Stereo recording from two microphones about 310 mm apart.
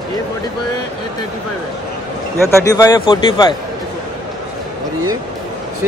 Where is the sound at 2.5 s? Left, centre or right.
Centre.